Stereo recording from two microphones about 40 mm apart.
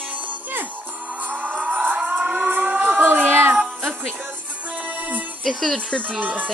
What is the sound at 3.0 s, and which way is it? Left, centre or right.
Music, right.